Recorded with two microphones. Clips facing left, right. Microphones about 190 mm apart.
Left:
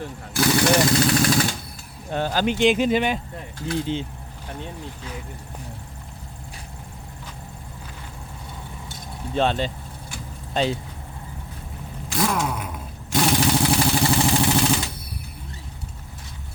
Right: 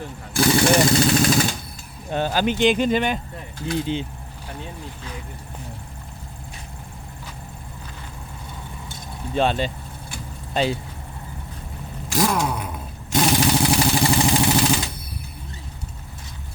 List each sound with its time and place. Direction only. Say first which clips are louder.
0.3 s speech: right 2 dB; 30° right (ahead or behind)
2.4 s speech: even; centre (ahead or behind)
3.7 s speech: right 1 dB; 15° right (ahead or behind)
9.3 s speech: right 1 dB; 10° right (ahead or behind)
12.0 s a sound: right 2 dB; 40° right (ahead or behind)
13.1 s vehicle: right 1 dB; 15° right (ahead or behind)